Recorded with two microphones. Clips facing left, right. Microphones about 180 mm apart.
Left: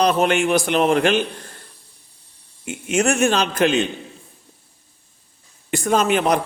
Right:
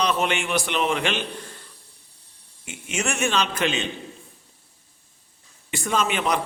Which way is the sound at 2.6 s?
50° left (ahead or behind).